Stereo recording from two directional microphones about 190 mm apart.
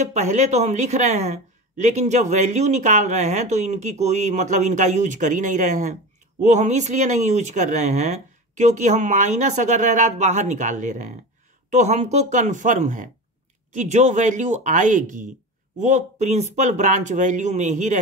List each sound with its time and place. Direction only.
0.0 s speech: 35° right (ahead or behind)